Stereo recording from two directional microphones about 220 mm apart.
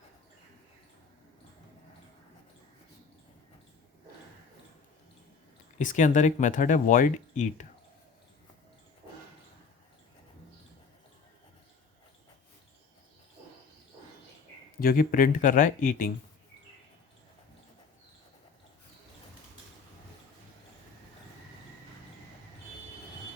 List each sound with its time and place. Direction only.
5.8 s speech: 35° left (ahead or behind)
14.8 s speech: 40° left (ahead or behind)